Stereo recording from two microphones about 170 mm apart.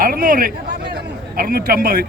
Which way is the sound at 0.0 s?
55° right (ahead or behind).